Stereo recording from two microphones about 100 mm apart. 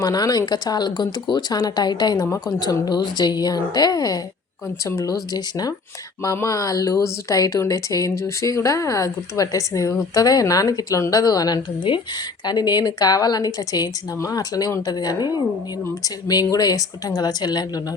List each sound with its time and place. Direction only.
0.0 s speech: 40° left (ahead or behind)
11.9 s speech: 60° left (ahead or behind)
12.5 s speech: 45° left (ahead or behind)